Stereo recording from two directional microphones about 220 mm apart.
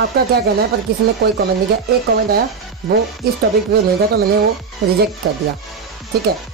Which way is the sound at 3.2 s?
45° right (ahead or behind).